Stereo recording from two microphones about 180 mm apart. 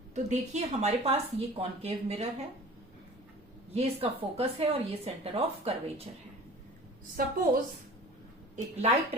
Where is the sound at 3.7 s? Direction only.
35° right (ahead or behind).